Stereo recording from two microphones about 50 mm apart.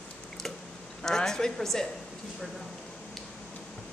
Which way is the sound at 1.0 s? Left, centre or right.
Centre.